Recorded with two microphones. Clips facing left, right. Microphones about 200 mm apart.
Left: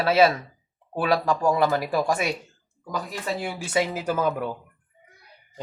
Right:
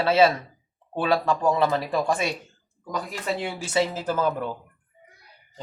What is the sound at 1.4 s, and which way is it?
Speech, 10° left (ahead or behind).